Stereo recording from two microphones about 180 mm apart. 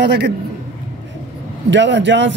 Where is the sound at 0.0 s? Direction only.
70° right (ahead or behind).